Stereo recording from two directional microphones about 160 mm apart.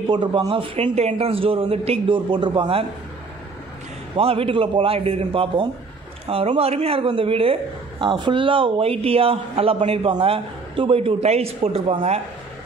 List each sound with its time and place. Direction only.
0.1 s a man's voice: 30° right (ahead or behind)
4.2 s a man's voice: 35° right (ahead or behind)